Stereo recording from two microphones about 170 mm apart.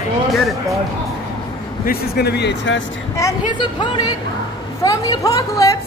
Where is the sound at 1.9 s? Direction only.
70° left (ahead or behind); by 2.8 s 90° left.